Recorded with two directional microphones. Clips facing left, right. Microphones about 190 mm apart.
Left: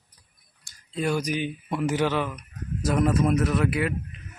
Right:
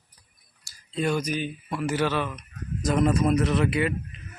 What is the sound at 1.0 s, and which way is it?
Speech, 5° left (ahead or behind).